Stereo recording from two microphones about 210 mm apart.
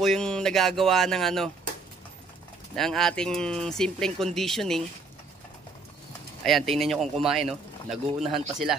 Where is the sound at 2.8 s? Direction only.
Centre (ahead or behind).